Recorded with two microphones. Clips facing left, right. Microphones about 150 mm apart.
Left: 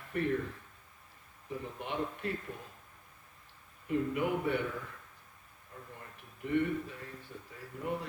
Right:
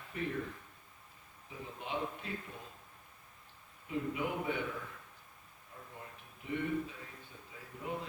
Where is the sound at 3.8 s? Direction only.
55° left (ahead or behind).